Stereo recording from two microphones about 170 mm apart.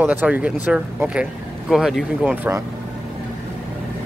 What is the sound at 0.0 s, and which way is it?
Speech, 10° right (ahead or behind).